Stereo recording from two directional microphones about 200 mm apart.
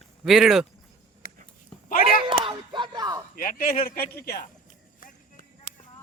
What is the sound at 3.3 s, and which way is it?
Speech, 45° left (ahead or behind).